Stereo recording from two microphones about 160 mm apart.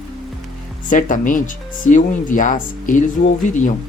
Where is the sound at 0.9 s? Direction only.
55° left (ahead or behind).